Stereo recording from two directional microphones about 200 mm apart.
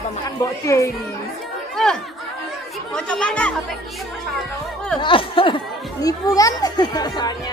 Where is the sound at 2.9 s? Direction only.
5° left (ahead or behind).